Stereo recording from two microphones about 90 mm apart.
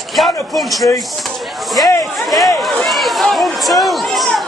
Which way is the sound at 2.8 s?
Centre (ahead or behind).